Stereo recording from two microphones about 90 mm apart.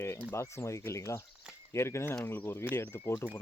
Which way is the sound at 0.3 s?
30° left (ahead or behind).